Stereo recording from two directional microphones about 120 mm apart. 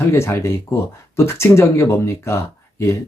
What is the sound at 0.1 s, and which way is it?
Speech, 20° left (ahead or behind).